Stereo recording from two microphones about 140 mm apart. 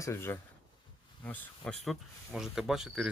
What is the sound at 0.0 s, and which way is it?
Speech, 20° left (ahead or behind).